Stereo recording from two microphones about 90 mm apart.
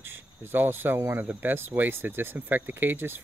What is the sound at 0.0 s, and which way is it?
Speech, 25° right (ahead or behind).